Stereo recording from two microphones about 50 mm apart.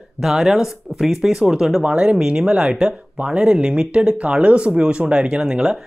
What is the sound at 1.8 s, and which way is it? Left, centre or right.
Speech, right.